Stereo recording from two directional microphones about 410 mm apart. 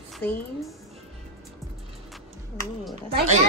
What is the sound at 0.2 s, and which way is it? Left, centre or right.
Speech, centre.